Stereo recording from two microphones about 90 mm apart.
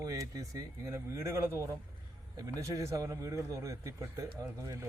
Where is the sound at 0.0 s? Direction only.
40° right (ahead or behind).